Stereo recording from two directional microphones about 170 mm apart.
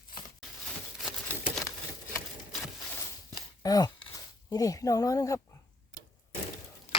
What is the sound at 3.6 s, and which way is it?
Speech, 20° left (ahead or behind).